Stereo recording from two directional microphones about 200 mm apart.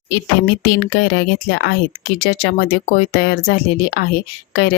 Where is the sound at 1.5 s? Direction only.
60° left (ahead or behind).